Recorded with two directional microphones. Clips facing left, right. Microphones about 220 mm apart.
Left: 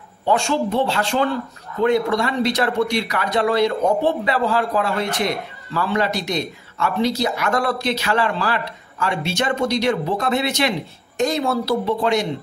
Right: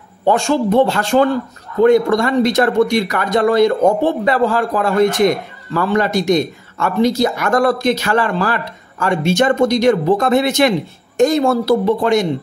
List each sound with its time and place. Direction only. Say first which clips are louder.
0.2 s speech: right 5 dB; 45° right (ahead or behind)